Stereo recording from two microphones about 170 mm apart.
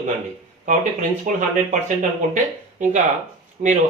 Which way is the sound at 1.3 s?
50° right (ahead or behind).